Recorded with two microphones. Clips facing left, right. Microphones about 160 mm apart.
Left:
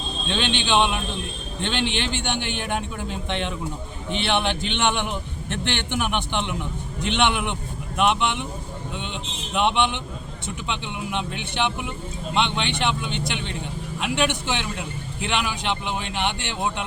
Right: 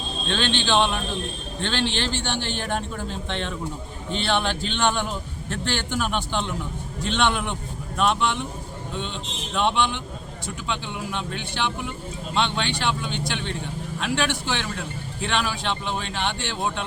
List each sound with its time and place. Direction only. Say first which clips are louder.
0.3 s a man's voice: even; 15° left (ahead or behind)
9.6 s a man's voice: left 1 dB; 20° left (ahead or behind)